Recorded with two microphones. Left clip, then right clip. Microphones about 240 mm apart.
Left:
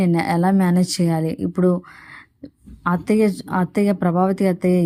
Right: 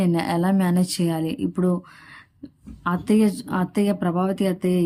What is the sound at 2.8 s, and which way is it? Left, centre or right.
Speech, centre.